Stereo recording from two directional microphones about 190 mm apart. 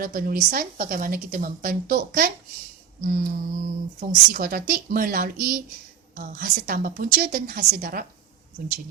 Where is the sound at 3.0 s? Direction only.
45° right (ahead or behind).